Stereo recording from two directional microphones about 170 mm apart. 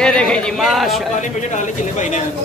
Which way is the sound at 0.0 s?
5° left (ahead or behind).